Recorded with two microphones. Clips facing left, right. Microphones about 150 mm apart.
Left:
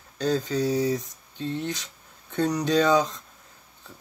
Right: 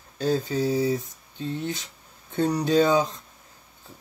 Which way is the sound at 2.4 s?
30° right (ahead or behind).